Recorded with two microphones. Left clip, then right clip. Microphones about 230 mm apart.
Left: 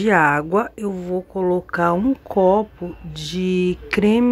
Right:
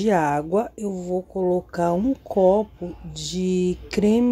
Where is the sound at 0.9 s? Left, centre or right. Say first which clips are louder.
Left 2 dB; centre.